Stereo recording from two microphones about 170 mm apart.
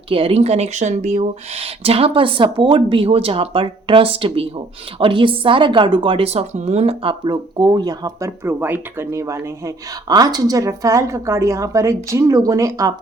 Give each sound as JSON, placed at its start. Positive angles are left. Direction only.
{"t": 0.1, "sound": "speech", "side_deg": -35}